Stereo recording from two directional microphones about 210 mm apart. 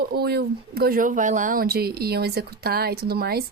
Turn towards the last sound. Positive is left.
turn(degrees=-50)  # may be behind; listen again after turning